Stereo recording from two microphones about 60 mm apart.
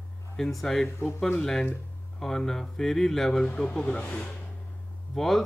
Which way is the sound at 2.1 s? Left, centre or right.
Centre.